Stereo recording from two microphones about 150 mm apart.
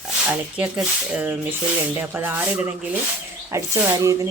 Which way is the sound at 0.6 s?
10° right (ahead or behind).